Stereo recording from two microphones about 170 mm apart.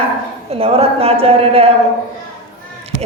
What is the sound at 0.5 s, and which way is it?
A woman's voice, 35° right (ahead or behind).